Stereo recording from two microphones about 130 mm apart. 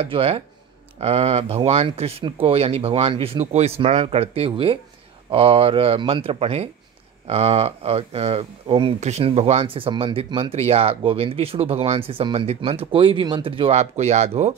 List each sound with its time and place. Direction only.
0.0 s speech: 50° right (ahead or behind)
9.0 s speech: 60° right (ahead or behind)